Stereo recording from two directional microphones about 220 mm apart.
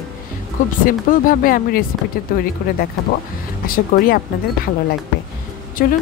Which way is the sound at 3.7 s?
40° left (ahead or behind).